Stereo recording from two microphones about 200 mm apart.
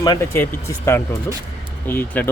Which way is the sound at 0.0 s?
15° left (ahead or behind).